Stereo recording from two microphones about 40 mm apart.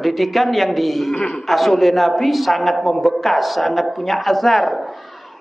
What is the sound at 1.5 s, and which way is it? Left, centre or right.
A man's voice, centre.